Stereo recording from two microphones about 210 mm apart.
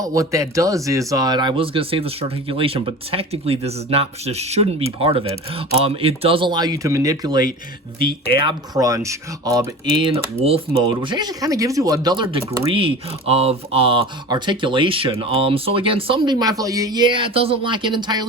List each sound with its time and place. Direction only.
0.0 s speech: 15° right (ahead or behind)